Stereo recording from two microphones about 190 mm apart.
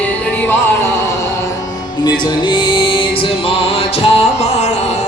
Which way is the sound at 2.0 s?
25° left (ahead or behind).